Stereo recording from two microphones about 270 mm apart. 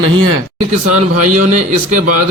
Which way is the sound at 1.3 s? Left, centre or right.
Right.